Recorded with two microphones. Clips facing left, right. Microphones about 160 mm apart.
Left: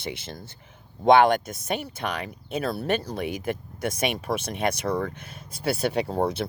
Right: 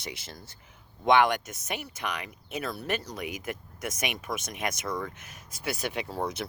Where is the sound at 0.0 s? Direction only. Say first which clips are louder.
Left 7 dB; 25° left (ahead or behind).